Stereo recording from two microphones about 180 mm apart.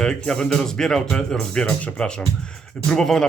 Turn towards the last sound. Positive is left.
turn(degrees=5)  # may be behind; listen again after turning